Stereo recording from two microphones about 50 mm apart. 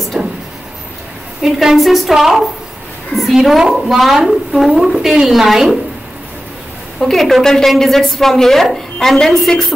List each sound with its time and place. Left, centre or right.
0.2 s a sound: centre
1.4 s a woman's voice: centre
7.0 s a woman's voice: centre